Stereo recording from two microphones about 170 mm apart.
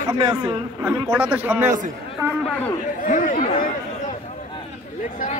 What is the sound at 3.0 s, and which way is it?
Speech, 55° left (ahead or behind).